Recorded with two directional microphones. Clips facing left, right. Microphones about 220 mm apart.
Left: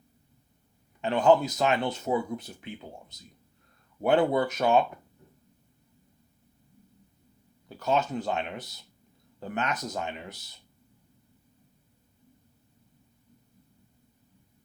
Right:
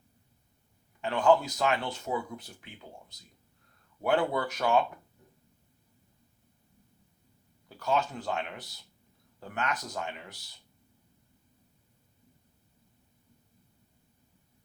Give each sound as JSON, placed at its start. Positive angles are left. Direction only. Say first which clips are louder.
{"t": 1.0, "sound": "speech", "louder": "left 3 dB", "side_deg": 20}
{"t": 7.8, "sound": "speech", "louder": "left 3 dB", "side_deg": 20}